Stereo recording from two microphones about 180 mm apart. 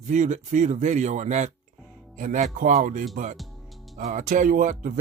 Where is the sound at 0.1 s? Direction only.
40° right (ahead or behind).